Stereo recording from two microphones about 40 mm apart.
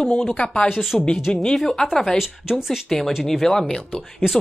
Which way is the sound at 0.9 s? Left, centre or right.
Centre.